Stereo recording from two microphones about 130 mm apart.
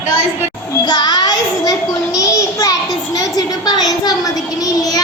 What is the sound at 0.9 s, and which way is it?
Child singing, 30° left (ahead or behind).